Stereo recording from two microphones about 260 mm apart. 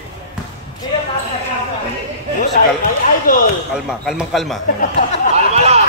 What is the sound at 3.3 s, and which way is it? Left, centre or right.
Speech, left.